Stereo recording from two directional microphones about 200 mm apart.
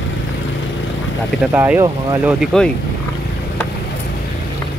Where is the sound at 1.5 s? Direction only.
15° right (ahead or behind).